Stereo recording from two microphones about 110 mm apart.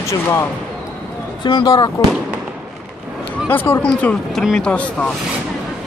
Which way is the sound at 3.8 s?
10° left (ahead or behind).